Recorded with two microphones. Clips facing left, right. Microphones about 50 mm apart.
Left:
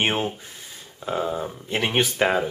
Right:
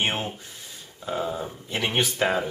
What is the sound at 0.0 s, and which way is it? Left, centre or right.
Speech, centre.